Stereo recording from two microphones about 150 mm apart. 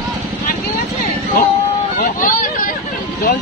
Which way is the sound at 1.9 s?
75° left (ahead or behind).